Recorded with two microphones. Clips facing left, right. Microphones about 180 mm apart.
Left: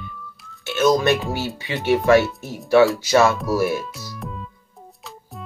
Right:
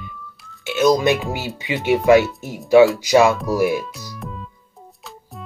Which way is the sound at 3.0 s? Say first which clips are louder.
Right 2 dB; 15° right (ahead or behind).